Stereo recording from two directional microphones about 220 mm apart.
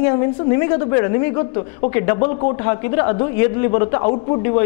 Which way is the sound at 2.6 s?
15° left (ahead or behind).